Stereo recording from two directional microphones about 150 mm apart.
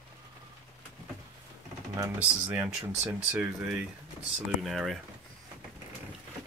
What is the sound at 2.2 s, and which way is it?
Speech, 10° right (ahead or behind).